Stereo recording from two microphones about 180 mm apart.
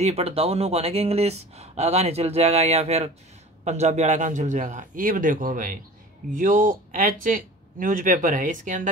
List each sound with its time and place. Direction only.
0.0 s speech: 35° right (ahead or behind)